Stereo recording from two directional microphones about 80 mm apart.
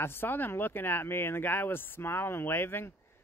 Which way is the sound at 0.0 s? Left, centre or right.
Left.